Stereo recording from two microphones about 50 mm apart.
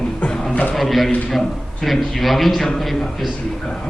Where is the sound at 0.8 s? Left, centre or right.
Centre.